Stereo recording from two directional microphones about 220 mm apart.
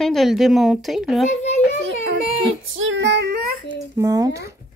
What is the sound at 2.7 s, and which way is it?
Female singing, 60° right (ahead or behind).